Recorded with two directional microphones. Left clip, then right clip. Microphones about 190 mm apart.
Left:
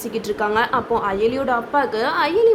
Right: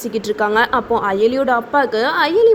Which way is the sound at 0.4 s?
25° right (ahead or behind).